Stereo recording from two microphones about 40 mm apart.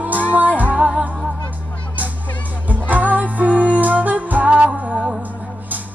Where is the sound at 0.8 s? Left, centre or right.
Right.